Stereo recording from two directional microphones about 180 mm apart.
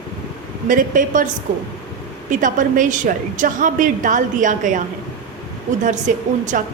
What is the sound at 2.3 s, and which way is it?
A woman's voice, 45° right (ahead or behind).